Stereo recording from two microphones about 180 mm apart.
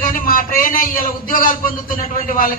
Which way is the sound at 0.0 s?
50° left (ahead or behind).